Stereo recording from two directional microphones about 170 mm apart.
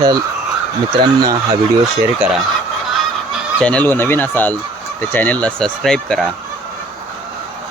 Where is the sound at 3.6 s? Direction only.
5° left (ahead or behind).